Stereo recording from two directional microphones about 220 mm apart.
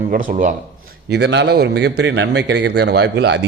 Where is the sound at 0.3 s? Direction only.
35° right (ahead or behind).